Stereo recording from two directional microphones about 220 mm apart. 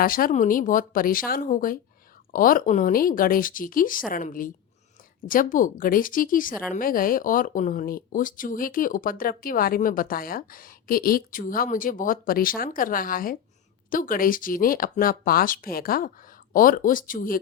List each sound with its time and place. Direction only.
0.0 s speech: 40° left (ahead or behind)